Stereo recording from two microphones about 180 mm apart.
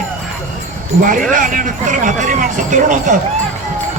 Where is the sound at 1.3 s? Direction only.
45° right (ahead or behind).